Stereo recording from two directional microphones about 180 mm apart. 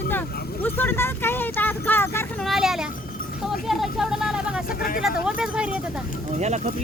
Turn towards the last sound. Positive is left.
turn(degrees=-40)  # may be behind; listen again after turning